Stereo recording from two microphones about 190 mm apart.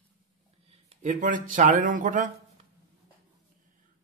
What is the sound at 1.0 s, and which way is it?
Speech, 40° right (ahead or behind).